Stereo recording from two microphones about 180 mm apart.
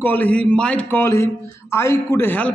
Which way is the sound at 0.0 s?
10° left (ahead or behind).